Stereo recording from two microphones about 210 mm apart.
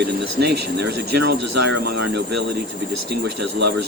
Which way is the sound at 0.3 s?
50° right (ahead or behind).